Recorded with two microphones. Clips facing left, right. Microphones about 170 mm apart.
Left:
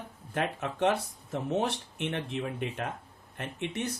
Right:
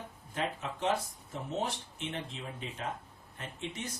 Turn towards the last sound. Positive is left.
turn(degrees=65)  # may be behind; listen again after turning